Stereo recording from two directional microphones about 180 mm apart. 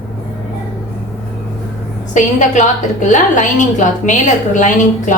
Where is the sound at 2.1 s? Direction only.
45° left (ahead or behind).